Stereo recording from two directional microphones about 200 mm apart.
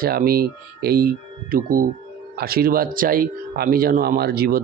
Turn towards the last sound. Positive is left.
turn(degrees=-50)  # may be behind; listen again after turning